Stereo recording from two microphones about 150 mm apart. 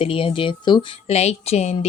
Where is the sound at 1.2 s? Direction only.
45° left (ahead or behind).